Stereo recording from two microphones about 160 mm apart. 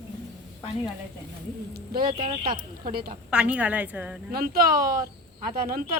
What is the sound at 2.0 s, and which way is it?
Speech, 30° right (ahead or behind).